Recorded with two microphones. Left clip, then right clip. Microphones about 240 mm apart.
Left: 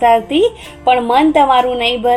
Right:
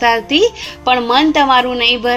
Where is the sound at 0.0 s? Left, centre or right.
Right.